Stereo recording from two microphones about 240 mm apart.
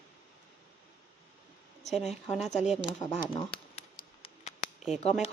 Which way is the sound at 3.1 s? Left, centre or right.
Left.